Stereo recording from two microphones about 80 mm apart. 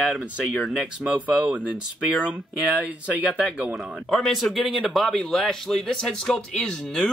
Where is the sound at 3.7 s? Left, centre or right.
Centre.